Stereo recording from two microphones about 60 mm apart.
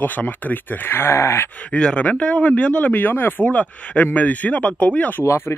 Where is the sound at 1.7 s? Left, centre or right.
Centre; by 3.4 s left.